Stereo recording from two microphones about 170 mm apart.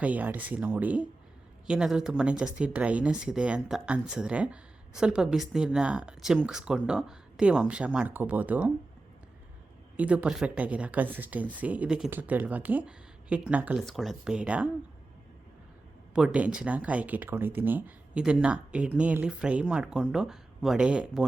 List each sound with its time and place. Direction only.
0.0 s speech: 10° right (ahead or behind)
10.0 s speech: 10° right (ahead or behind)
16.1 s speech: 5° right (ahead or behind)